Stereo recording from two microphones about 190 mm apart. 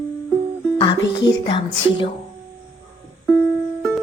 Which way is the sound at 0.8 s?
25° left (ahead or behind).